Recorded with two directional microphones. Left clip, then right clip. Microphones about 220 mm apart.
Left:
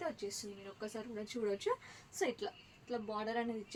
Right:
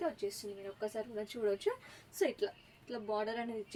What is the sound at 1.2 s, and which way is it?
A woman's voice, 15° left (ahead or behind).